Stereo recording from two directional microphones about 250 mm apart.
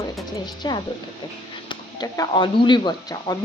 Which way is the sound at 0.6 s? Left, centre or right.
Centre.